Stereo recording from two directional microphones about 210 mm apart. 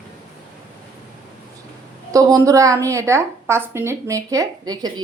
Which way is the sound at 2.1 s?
15° right (ahead or behind).